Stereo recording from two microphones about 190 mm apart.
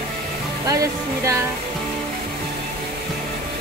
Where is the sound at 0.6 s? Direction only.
15° right (ahead or behind).